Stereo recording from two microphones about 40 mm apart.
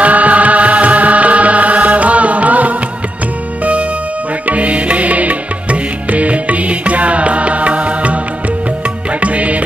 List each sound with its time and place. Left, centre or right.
0.0 s music: right
4.5 s music: right
9.2 s music: right